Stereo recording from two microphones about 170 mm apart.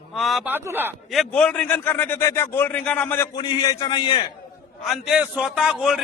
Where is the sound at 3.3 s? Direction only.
25° left (ahead or behind).